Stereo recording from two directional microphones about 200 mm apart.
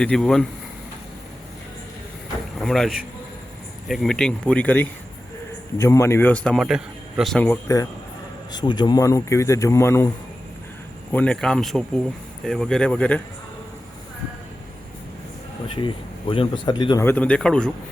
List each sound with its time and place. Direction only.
0.0 s speech: 5° left (ahead or behind)
2.6 s speech: centre (ahead or behind)
7.4 s speech: 15° left (ahead or behind)
11.1 s speech: 5° left (ahead or behind)
15.6 s speech: 25° left (ahead or behind)
17.1 s speech: 5° left (ahead or behind)